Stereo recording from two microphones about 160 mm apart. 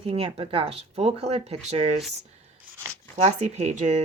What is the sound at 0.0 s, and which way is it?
Speech, 35° right (ahead or behind).